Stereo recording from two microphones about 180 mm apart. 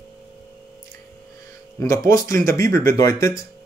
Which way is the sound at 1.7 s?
15° left (ahead or behind).